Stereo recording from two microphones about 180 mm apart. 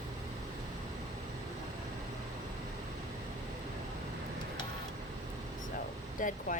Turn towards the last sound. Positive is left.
turn(degrees=45)  # may be behind; listen again after turning